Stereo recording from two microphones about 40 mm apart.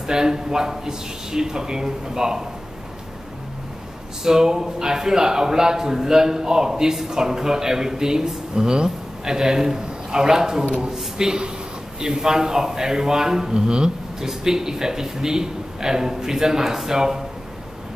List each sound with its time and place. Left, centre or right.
0.0 s a man's voice: centre
4.2 s a man's voice: centre